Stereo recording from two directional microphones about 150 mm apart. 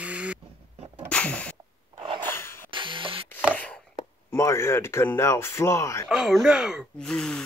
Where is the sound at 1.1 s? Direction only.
10° left (ahead or behind).